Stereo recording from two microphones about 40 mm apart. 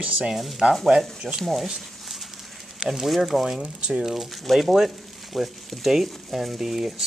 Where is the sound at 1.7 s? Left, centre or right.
Centre.